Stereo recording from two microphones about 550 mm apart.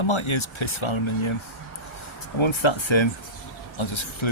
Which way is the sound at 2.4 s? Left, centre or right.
Left.